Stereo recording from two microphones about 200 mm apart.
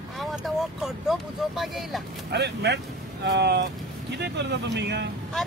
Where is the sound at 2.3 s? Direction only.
55° right (ahead or behind).